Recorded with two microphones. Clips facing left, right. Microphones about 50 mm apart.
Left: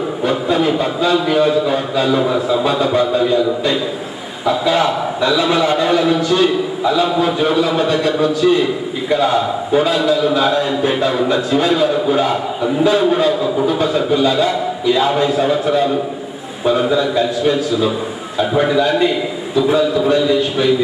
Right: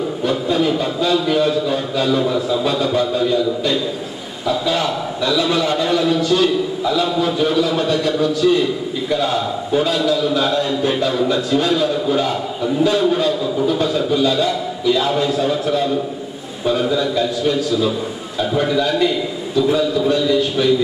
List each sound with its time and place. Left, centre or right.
0.2 s a man's voice: left